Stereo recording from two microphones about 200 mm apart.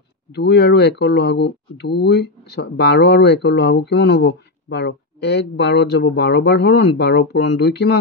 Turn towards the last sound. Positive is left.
turn(degrees=55)  # may be behind; listen again after turning